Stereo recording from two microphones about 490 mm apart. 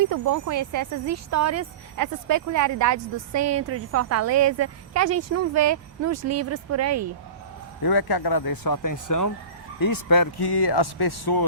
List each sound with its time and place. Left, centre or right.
0.1 s speech: right
7.8 s speech: left